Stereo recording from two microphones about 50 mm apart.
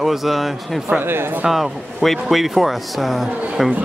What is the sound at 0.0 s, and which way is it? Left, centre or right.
Speech, centre.